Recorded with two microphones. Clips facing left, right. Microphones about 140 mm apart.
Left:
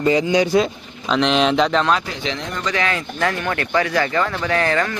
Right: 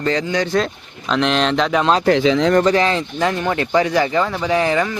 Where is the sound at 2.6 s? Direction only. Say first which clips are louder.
Right 6 dB; 30° right (ahead or behind).